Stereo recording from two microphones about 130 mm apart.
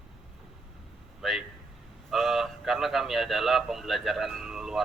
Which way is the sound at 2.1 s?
Centre (ahead or behind).